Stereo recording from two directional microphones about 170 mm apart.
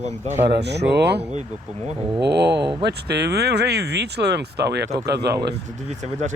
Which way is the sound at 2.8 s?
75° right (ahead or behind).